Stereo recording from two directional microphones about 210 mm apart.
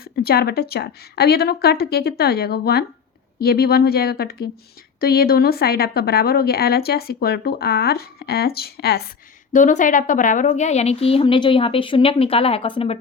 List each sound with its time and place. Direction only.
0.2 s a woman's voice: 45° left (ahead or behind)
9.5 s a woman's voice: 35° left (ahead or behind)